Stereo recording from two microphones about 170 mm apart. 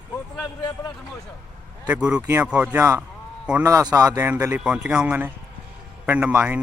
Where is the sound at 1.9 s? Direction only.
5° right (ahead or behind).